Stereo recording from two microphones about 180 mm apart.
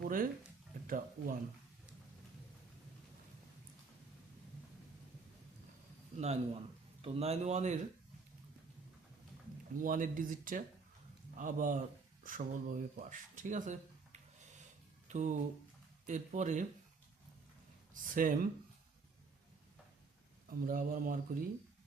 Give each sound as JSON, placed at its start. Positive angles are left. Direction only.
{"t": 0.0, "sound": "a sound", "side_deg": -50}
{"t": 0.9, "sound": "speech", "side_deg": -50}
{"t": 6.1, "sound": "speech", "side_deg": -35}
{"t": 9.8, "sound": "speech", "side_deg": -50}
{"t": 17.9, "sound": "speech", "side_deg": -50}
{"t": 20.5, "sound": "speech", "side_deg": -50}